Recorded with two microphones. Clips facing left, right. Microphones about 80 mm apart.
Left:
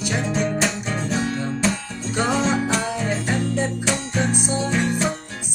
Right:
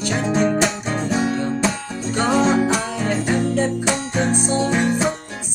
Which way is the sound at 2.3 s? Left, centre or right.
Centre.